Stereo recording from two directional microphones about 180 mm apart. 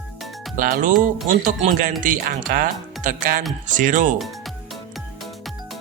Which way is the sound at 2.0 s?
50° right (ahead or behind).